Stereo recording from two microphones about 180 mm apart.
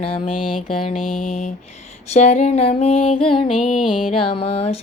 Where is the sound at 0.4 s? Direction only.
Centre (ahead or behind).